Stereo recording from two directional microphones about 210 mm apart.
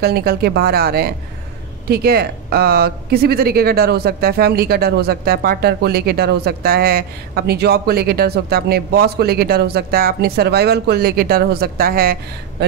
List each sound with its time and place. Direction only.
0.0 s speech: 50° right (ahead or behind)